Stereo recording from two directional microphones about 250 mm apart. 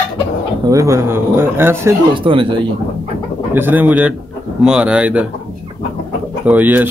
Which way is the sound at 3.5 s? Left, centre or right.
Centre.